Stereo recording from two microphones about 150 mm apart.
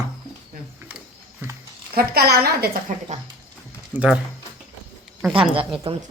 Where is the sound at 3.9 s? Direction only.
10° right (ahead or behind).